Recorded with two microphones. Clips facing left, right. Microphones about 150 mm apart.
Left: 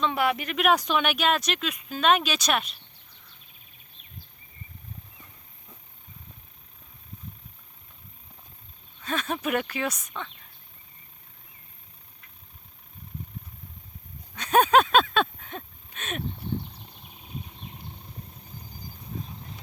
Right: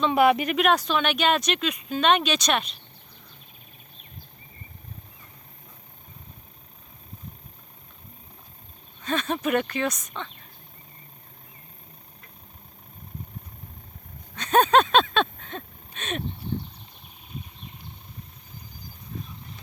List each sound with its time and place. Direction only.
0.1 s speech: 20° right (ahead or behind)
0.5 s speech: 5° left (ahead or behind)
9.0 s speech: 5° left (ahead or behind)
14.3 s a sound: 10° left (ahead or behind)